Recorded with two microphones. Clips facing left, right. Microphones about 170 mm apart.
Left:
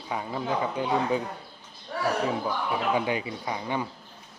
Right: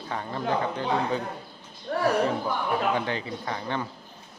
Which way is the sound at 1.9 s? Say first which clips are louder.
Right 5 dB; 55° right (ahead or behind).